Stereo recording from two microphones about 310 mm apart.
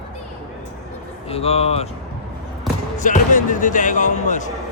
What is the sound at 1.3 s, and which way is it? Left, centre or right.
Speech, centre.